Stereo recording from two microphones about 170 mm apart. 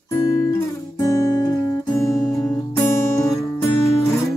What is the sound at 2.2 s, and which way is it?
Music, 20° left (ahead or behind).